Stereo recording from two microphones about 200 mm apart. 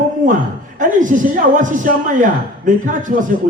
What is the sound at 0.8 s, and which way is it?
A woman's voice, 40° right (ahead or behind).